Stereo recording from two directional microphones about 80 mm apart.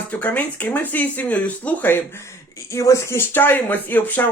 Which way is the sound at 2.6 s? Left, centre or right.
Left.